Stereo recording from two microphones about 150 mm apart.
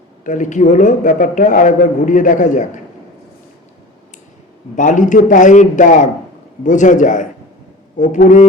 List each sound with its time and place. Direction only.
0.3 s a man's voice: 55° left (ahead or behind)
4.8 s a man's voice: 55° left (ahead or behind)